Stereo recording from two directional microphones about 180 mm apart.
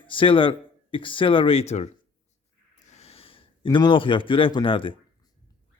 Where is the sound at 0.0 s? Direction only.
30° left (ahead or behind).